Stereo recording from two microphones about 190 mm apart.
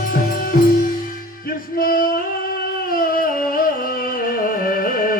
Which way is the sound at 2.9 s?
50° left (ahead or behind).